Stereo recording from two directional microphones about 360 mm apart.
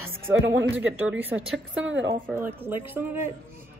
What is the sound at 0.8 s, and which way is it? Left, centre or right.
A woman's voice, centre.